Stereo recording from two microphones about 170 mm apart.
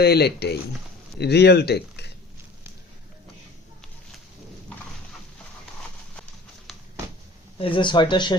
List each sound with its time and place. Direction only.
0.0 s speech: 70° left (ahead or behind)
7.6 s speech: 30° left (ahead or behind)